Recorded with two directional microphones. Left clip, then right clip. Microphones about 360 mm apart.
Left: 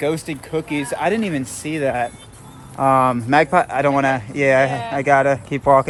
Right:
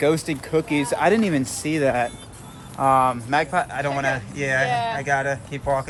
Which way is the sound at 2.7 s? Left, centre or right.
Left.